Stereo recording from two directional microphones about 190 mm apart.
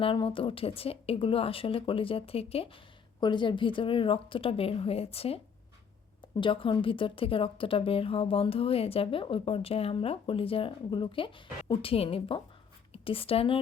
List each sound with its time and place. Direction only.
0.0 s a woman's voice: 30° left (ahead or behind)
6.4 s a woman's voice: 25° left (ahead or behind)